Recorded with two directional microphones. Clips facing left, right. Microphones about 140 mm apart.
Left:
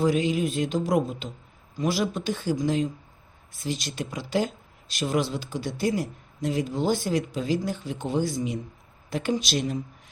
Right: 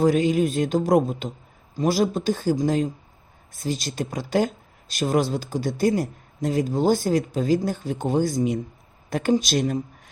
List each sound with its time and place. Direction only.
0.0 s speech: 45° right (ahead or behind)